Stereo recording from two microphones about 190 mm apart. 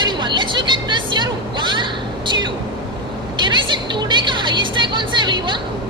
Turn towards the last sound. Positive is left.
turn(degrees=-25)  # may be behind; listen again after turning